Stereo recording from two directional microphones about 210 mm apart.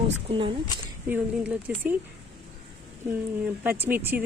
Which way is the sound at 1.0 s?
5° right (ahead or behind).